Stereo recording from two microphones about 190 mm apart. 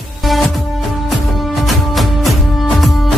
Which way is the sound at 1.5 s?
Centre (ahead or behind).